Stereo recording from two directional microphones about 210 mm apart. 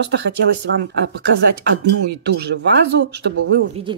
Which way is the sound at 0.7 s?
55° right (ahead or behind).